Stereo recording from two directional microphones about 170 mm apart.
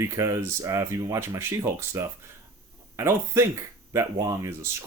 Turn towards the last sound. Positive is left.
turn(degrees=-15)  # may be behind; listen again after turning